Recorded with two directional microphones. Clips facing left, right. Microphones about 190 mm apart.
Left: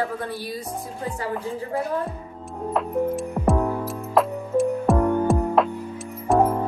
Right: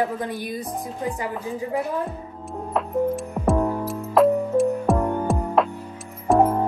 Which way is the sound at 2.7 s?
Centre (ahead or behind).